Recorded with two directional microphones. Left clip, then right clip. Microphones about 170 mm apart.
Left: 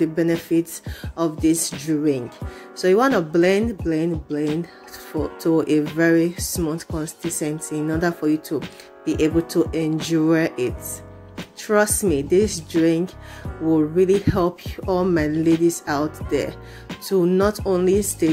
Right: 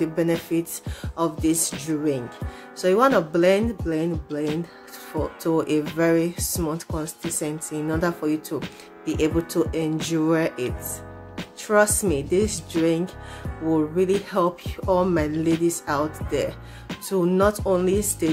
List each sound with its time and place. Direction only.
0.0 s speech: 10° left (ahead or behind)
5.1 s speech: 10° left (ahead or behind)
6.9 s speech: centre (ahead or behind)
7.3 s speech: 15° left (ahead or behind)